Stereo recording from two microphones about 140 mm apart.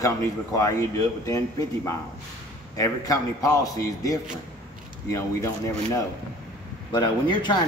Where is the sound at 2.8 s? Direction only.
25° left (ahead or behind).